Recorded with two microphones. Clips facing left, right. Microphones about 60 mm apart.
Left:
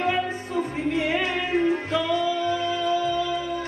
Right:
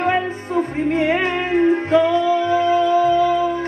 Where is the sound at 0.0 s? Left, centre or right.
Right.